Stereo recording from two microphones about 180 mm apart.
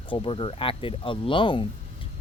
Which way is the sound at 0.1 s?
30° left (ahead or behind).